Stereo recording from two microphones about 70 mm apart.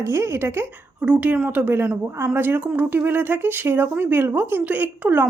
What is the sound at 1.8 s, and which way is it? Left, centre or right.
Speech, centre.